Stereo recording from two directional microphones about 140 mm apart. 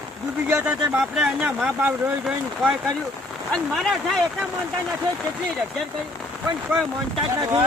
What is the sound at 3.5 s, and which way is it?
Speech, 5° left (ahead or behind).